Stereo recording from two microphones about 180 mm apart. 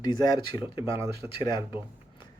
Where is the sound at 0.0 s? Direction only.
20° left (ahead or behind).